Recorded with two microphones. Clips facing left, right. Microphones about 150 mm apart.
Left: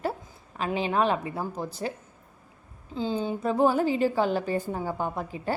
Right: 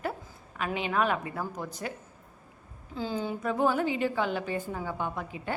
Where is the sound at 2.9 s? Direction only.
20° left (ahead or behind).